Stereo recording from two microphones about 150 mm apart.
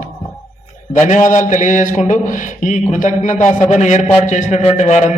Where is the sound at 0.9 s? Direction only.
55° left (ahead or behind).